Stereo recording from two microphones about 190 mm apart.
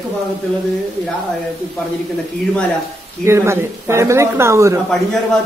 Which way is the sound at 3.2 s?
15° right (ahead or behind).